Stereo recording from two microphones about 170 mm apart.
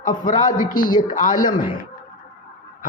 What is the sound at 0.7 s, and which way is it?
Speech, 55° left (ahead or behind).